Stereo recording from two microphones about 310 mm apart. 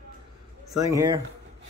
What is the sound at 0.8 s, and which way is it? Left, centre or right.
Speech, centre.